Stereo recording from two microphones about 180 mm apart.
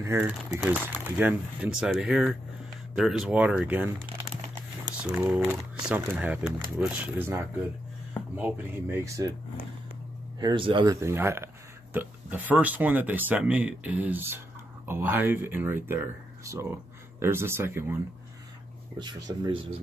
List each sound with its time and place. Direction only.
0.0 s speech: 15° right (ahead or behind)
5.0 s speech: 10° right (ahead or behind)
8.4 s speech: 10° right (ahead or behind)
10.4 s speech: 25° right (ahead or behind)
18.9 s speech: 25° right (ahead or behind)